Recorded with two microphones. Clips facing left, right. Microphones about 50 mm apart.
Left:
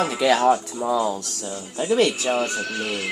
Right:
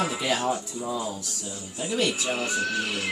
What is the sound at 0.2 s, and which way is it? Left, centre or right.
Speech, left.